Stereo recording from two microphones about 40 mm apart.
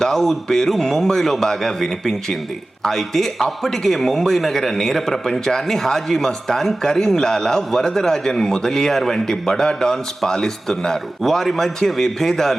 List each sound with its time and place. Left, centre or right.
0.0 s a man's voice: centre